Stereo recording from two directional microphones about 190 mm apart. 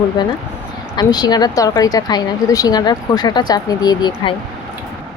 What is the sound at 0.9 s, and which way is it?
A woman's voice, 20° left (ahead or behind).